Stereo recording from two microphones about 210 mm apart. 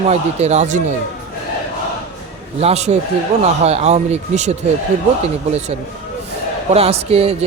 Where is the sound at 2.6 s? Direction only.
30° right (ahead or behind).